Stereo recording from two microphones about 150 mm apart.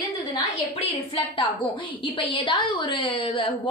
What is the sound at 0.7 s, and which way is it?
A woman's voice, 40° left (ahead or behind).